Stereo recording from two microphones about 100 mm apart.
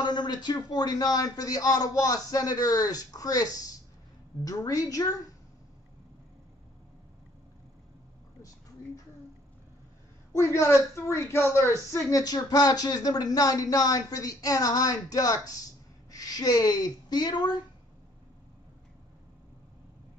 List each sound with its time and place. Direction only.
0.0 s speech: 45° left (ahead or behind)
10.3 s speech: 25° left (ahead or behind); by 17.6 s 45° left (ahead or behind)